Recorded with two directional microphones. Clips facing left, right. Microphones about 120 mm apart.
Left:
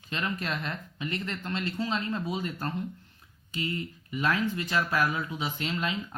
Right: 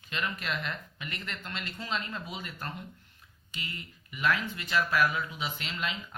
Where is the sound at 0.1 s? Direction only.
35° left (ahead or behind).